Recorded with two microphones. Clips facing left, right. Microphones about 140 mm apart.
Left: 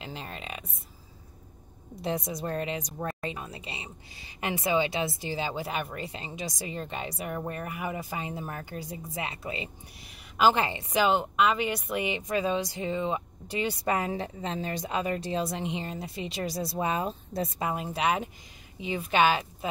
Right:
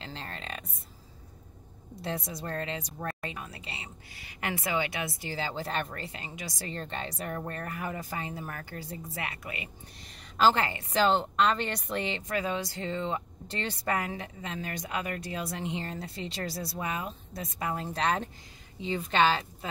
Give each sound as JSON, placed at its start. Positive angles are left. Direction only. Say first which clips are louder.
{"t": 0.0, "sound": "music", "louder": "left 2 dB", "side_deg": 15}
{"t": 2.0, "sound": "speech", "louder": "left 4 dB", "side_deg": 15}
{"t": 9.2, "sound": "speech", "louder": "left 5 dB", "side_deg": 25}
{"t": 10.0, "sound": "speech", "louder": "left 1 dB", "side_deg": 15}
{"t": 13.9, "sound": "speech", "louder": "left 3 dB", "side_deg": 30}